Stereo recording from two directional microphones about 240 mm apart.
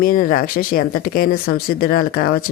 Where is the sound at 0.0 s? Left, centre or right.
Left.